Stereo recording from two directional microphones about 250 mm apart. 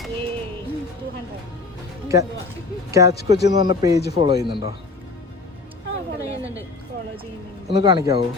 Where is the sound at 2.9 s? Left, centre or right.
Centre.